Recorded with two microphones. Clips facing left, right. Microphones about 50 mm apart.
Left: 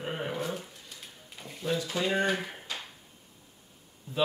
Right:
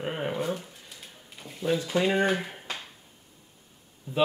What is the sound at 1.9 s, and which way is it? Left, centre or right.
Speech, centre.